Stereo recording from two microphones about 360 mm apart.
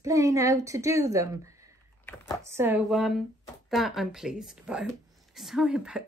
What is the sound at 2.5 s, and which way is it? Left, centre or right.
A woman's voice, centre.